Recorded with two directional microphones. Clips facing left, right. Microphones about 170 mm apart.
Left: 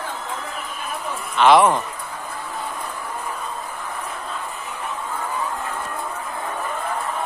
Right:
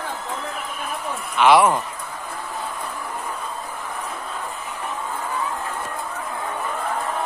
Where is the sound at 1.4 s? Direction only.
10° right (ahead or behind).